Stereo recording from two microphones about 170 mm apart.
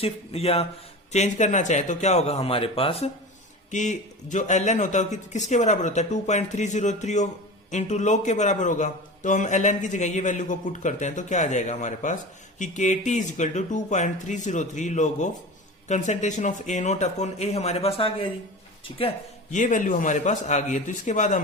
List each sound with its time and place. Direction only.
0.0 s speech: 35° left (ahead or behind)
3.7 s a man's voice: 45° left (ahead or behind)